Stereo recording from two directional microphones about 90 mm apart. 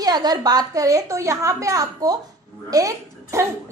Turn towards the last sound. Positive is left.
turn(degrees=-35)  # may be behind; listen again after turning